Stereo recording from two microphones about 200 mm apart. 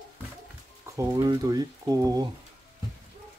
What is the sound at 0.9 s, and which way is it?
Speech, 15° right (ahead or behind).